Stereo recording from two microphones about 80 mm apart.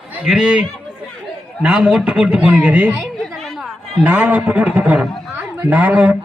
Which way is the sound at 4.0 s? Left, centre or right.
Centre.